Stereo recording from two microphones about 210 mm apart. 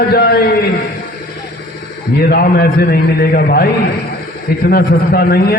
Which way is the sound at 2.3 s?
45° left (ahead or behind).